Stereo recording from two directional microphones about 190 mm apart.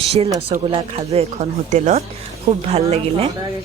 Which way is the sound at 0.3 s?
30° right (ahead or behind).